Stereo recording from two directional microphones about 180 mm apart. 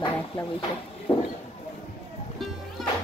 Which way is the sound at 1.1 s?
30° left (ahead or behind).